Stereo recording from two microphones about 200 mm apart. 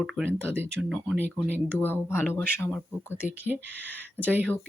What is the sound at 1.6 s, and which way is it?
Speech, 10° left (ahead or behind).